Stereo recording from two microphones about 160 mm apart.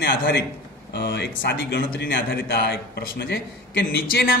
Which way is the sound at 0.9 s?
90° left.